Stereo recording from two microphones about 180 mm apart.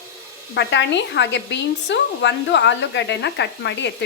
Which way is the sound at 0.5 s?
80° left.